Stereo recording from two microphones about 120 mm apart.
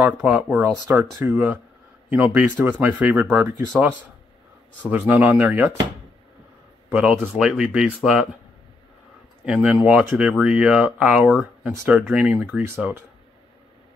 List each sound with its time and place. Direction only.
0.0 s speech: 10° right (ahead or behind)
4.9 s speech: 15° right (ahead or behind)
6.9 s speech: 10° right (ahead or behind)
9.5 s speech: 10° right (ahead or behind)
12.4 s speech: 20° right (ahead or behind)